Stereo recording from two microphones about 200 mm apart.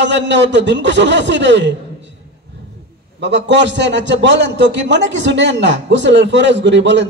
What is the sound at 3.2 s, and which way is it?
A man's voice, 65° right (ahead or behind).